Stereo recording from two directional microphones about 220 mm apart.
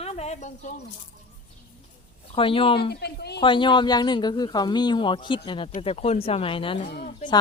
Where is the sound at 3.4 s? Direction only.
20° left (ahead or behind).